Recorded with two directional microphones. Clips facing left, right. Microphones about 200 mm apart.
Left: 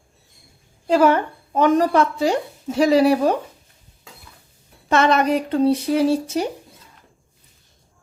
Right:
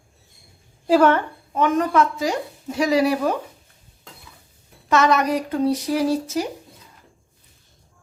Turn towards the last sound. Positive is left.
turn(degrees=30)  # may be behind; listen again after turning